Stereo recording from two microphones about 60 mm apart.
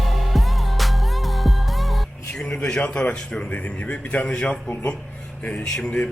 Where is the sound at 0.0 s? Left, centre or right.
Centre.